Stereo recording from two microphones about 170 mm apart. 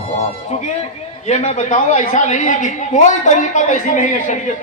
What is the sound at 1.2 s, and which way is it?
A woman's voice, 40° left (ahead or behind).